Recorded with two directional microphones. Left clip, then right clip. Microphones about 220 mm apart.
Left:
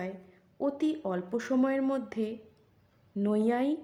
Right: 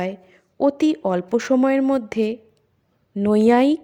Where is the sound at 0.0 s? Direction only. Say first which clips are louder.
Right 12 dB; 35° right (ahead or behind).